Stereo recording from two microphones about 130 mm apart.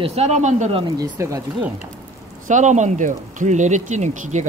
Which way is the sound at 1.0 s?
25° right (ahead or behind).